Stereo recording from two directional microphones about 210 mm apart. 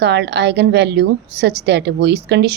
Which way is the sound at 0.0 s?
55° right (ahead or behind).